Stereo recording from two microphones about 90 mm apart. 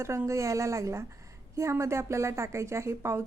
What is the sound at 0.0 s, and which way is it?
A woman's voice, 30° right (ahead or behind).